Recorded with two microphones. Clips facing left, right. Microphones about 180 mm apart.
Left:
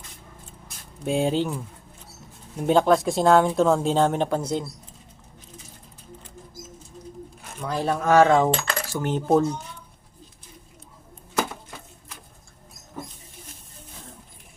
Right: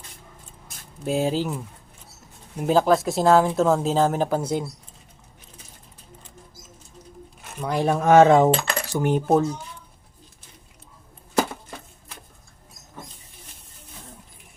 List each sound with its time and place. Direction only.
1.0 s speech: centre (ahead or behind)
7.6 s speech: 15° right (ahead or behind)
8.9 s cutlery: 15° right (ahead or behind)
9.2 s speech: centre (ahead or behind)